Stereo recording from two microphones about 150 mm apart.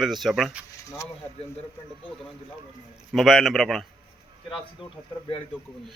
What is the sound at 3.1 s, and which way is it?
Speech, centre (ahead or behind).